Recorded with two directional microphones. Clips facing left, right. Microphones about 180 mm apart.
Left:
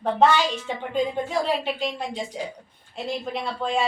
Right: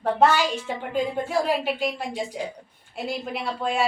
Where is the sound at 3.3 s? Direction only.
10° right (ahead or behind).